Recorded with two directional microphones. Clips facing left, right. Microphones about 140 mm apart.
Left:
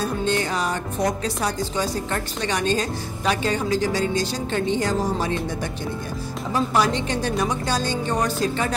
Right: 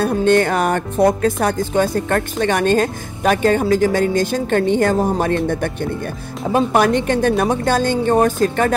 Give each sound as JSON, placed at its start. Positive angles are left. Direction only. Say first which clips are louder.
{"t": 0.0, "sound": "a woman's voice", "louder": "right 9 dB", "side_deg": -55}